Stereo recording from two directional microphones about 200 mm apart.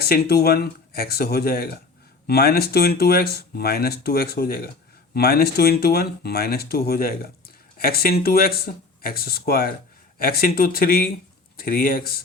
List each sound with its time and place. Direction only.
0.0 s speech: 50° left (ahead or behind)